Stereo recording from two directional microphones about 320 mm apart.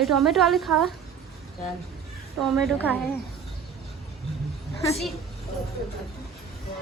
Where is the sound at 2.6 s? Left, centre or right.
Centre.